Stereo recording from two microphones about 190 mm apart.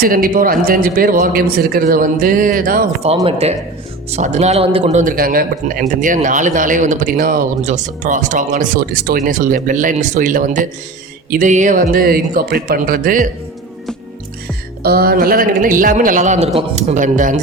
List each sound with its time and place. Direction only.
0.0 s a man's voice: 50° right (ahead or behind)
3.2 s a man's voice: 35° right (ahead or behind)
14.8 s a man's voice: 55° right (ahead or behind)